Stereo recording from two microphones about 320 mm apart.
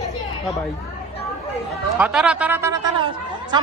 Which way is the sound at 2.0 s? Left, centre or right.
Centre.